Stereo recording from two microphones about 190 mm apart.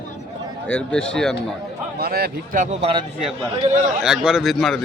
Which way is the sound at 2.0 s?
55° right (ahead or behind).